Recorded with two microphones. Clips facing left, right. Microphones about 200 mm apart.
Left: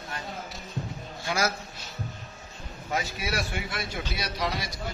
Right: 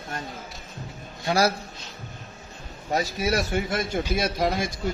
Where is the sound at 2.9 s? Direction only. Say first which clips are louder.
Right 6 dB; 40° right (ahead or behind).